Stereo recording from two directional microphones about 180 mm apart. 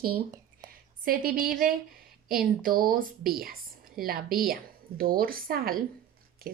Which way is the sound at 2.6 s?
50° right (ahead or behind).